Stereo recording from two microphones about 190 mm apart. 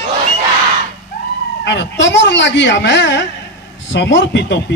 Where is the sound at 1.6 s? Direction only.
70° left (ahead or behind).